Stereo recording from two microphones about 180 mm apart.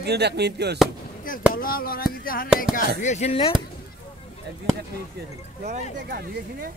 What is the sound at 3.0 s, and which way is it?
Speech, 40° left (ahead or behind).